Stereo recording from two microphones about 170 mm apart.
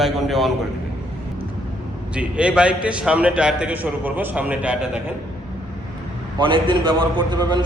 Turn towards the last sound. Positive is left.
turn(degrees=-25)  # may be behind; listen again after turning